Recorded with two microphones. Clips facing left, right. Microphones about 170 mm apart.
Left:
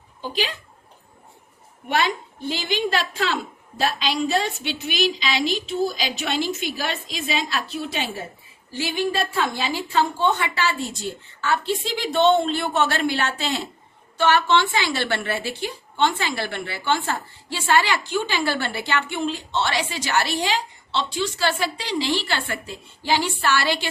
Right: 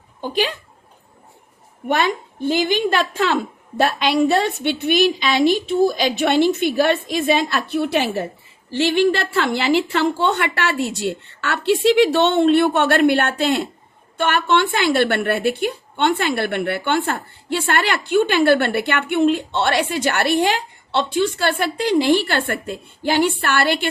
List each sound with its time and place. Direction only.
0.2 s a woman's voice: 55° right (ahead or behind)
2.5 s a woman's voice: 50° right (ahead or behind)